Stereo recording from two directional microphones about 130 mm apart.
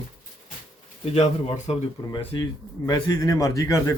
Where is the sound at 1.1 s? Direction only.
55° left (ahead or behind).